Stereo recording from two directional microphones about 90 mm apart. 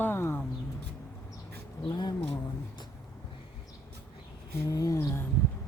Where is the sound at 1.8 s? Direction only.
55° left (ahead or behind).